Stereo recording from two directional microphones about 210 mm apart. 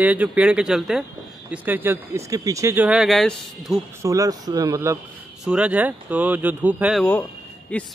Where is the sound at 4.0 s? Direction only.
15° right (ahead or behind).